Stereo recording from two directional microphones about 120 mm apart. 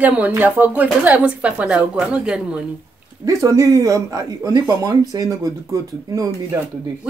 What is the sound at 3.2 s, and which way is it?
Speech, 30° right (ahead or behind).